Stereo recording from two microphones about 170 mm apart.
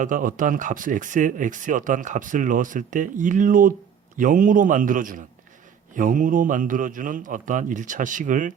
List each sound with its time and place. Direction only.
0.0 s speech: 50° right (ahead or behind)